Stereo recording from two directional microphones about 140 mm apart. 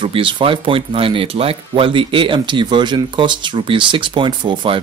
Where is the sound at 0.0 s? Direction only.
35° right (ahead or behind).